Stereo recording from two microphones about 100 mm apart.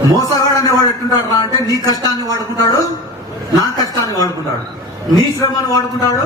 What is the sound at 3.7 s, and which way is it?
A woman's voice, 40° left (ahead or behind).